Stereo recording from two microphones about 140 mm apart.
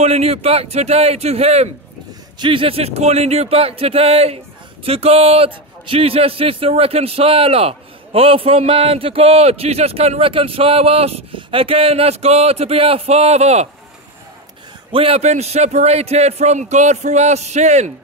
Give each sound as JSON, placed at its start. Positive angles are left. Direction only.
{"t": 0.0, "sound": "a man's voice", "side_deg": -45}
{"t": 2.3, "sound": "a man's voice", "side_deg": -35}
{"t": 14.9, "sound": "a man's voice", "side_deg": -45}